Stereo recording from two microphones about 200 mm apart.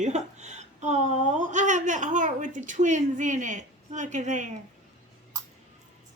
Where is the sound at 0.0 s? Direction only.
35° right (ahead or behind).